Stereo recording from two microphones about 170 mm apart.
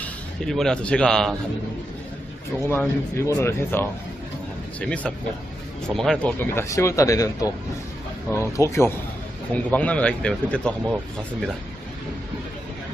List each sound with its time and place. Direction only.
0.0 s speech: 5° left (ahead or behind)
2.6 s speech: 15° left (ahead or behind)
8.3 s speech: 15° left (ahead or behind)